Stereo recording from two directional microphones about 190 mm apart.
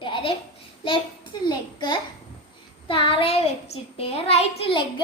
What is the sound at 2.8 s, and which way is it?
Child singing, 25° left (ahead or behind).